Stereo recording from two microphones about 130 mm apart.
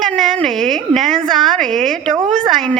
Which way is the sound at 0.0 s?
Centre (ahead or behind).